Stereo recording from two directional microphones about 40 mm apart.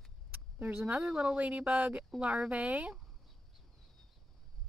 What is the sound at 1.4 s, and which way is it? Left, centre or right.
Speech, right.